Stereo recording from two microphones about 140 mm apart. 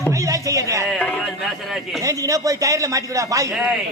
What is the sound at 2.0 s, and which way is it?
A man's voice, 25° right (ahead or behind).